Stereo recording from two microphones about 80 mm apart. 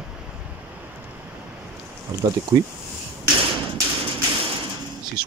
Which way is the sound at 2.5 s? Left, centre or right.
Right.